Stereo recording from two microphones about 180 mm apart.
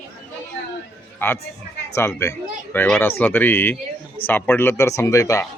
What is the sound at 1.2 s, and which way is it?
Speech, 10° left (ahead or behind).